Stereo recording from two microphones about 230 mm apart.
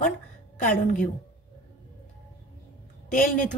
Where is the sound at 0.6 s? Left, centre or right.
Left.